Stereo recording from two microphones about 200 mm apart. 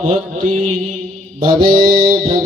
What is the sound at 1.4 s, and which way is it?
Mantra, 45° right (ahead or behind).